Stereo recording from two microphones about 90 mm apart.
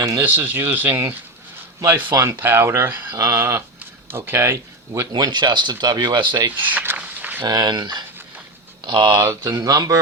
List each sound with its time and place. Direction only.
0.0 s speech: 35° right (ahead or behind)
0.3 s speech: 20° right (ahead or behind)
3.8 s a sound: 25° right (ahead or behind)
5.1 s speech: 55° right (ahead or behind)
6.5 s a sound: 20° right (ahead or behind)
7.4 s speech: 50° right (ahead or behind)
9.1 s speech: 40° right (ahead or behind)